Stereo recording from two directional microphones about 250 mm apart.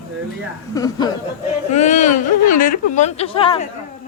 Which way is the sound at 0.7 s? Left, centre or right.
Centre.